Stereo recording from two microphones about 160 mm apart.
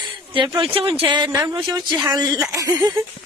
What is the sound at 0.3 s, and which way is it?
Speech, 30° right (ahead or behind).